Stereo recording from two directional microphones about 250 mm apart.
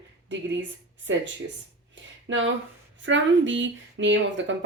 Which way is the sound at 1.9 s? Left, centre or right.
Right.